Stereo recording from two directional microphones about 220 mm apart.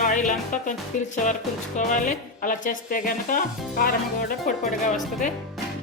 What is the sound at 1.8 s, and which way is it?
Speech, 35° left (ahead or behind).